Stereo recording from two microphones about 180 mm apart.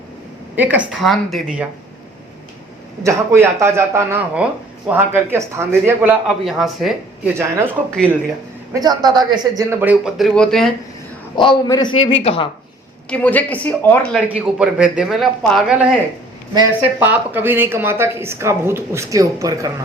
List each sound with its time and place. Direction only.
0.5 s speech: 10° right (ahead or behind)
3.0 s a woman's voice: 15° right (ahead or behind)
7.3 s a woman's voice: 15° right (ahead or behind)
8.7 s a woman's voice: 20° right (ahead or behind); by 10.7 s 5° left (ahead or behind)
11.3 s a man's voice: 25° left (ahead or behind)
13.1 s a woman's voice: 10° left (ahead or behind)
14.3 s speech: 5° right (ahead or behind)
17.0 s a woman's voice: 10° right (ahead or behind)